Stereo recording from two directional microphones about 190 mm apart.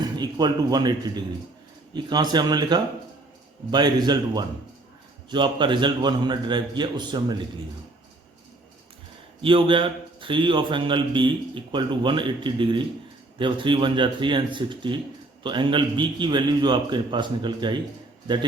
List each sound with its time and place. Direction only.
0.0 s a man's voice: 20° right (ahead or behind)
9.4 s a man's voice: 25° right (ahead or behind)